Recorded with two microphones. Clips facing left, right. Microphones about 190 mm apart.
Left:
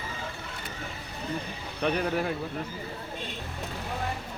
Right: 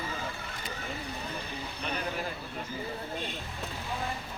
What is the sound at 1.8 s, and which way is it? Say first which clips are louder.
Speech: left 10 dB; 65° left (ahead or behind).